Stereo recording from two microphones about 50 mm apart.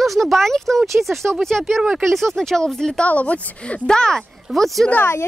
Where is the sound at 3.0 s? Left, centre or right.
Left.